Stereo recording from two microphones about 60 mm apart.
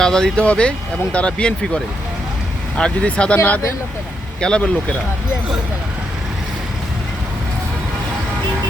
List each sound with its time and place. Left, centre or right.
0.0 s speech: centre
4.4 s speech: centre